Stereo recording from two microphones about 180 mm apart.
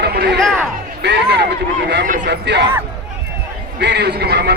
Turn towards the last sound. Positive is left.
turn(degrees=-65)  # may be behind; listen again after turning